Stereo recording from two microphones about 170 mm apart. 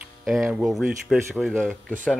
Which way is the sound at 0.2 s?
5° right (ahead or behind).